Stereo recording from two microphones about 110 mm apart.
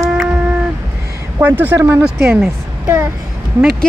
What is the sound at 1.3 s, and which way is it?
A woman's voice, 15° right (ahead or behind).